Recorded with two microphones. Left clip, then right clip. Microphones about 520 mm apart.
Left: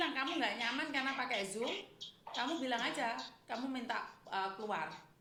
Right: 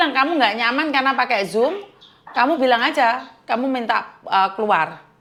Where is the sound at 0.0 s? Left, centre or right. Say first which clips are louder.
Right 19 dB; right.